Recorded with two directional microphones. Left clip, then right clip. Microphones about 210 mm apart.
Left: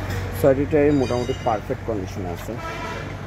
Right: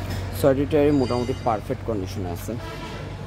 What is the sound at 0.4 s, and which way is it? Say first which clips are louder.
Speech: left 2 dB; 10° right (ahead or behind).